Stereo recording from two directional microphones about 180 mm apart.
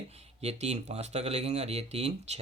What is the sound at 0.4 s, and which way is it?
Speech, 35° right (ahead or behind).